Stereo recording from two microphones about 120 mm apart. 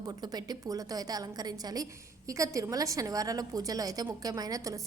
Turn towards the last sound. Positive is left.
turn(degrees=-30)  # may be behind; listen again after turning